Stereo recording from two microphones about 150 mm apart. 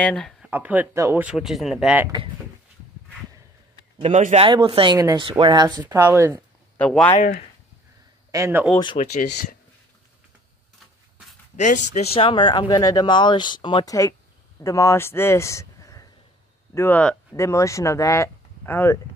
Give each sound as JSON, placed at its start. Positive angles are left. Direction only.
{"t": 0.0, "sound": "speech", "side_deg": 5}
{"t": 0.4, "sound": "speech", "side_deg": -10}
{"t": 1.2, "sound": "speech", "side_deg": 0}
{"t": 4.0, "sound": "a man's voice", "side_deg": -50}
{"t": 4.5, "sound": "speech", "side_deg": -35}
{"t": 6.8, "sound": "speech", "side_deg": 10}
{"t": 7.2, "sound": "speech", "side_deg": 75}
{"t": 8.3, "sound": "speech", "side_deg": -20}
{"t": 9.0, "sound": "speech", "side_deg": 55}
{"t": 11.5, "sound": "speech", "side_deg": 55}
{"t": 12.1, "sound": "speech", "side_deg": 35}
{"t": 14.6, "sound": "speech", "side_deg": 20}
{"t": 17.4, "sound": "speech", "side_deg": 20}